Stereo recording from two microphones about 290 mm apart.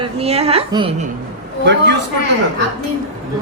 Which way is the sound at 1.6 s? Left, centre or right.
Right.